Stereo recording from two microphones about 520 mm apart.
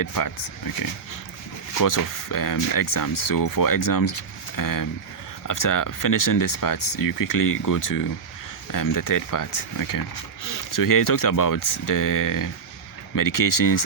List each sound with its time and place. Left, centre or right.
0.0 s speech: left
1.8 s speech: left